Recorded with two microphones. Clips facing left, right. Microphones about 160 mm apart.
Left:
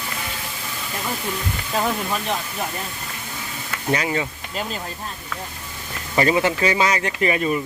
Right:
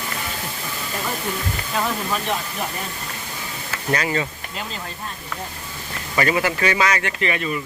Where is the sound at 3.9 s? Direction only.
15° left (ahead or behind).